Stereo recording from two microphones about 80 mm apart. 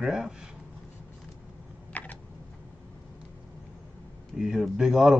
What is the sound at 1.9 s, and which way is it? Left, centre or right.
Typing, left.